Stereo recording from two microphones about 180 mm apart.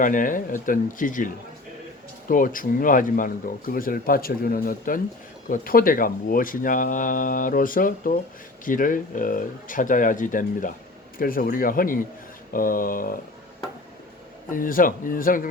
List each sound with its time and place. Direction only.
0.0 s speech: 45° left (ahead or behind)
2.3 s speech: 50° left (ahead or behind)
14.5 s speech: 50° left (ahead or behind)